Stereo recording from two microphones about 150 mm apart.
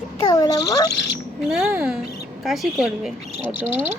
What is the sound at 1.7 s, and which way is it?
Speech, 15° right (ahead or behind).